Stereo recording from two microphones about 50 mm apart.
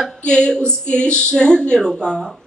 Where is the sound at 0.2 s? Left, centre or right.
Centre.